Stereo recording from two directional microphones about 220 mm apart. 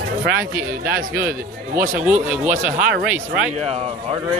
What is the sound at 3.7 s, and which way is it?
Speech, 25° right (ahead or behind).